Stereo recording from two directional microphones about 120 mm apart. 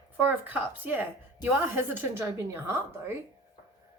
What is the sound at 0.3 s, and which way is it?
A woman's voice, 15° right (ahead or behind).